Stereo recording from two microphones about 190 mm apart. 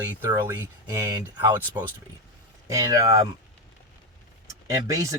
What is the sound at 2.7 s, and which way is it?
Speech, 15° right (ahead or behind).